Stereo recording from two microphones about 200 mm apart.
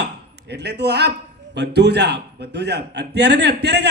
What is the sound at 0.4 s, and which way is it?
A man's voice, 55° right (ahead or behind).